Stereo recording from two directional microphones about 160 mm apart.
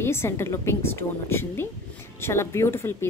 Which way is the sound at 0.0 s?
15° left (ahead or behind).